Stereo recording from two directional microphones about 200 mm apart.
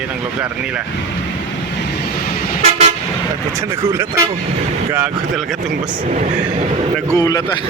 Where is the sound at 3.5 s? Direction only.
15° right (ahead or behind).